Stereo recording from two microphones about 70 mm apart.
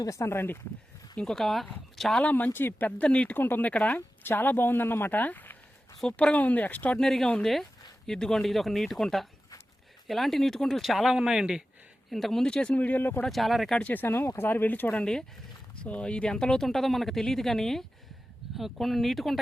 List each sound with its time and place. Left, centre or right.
0.0 s speech: left
1.1 s speech: centre
2.2 s speech: left
3.3 s speech: left
7.0 s speech: centre
12.1 s speech: centre
12.7 s speech: left
13.2 s speech: centre
13.7 s speech: left
14.9 s speech: centre